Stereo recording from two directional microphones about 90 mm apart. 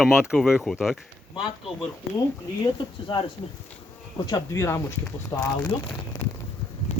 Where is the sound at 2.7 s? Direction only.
65° left (ahead or behind).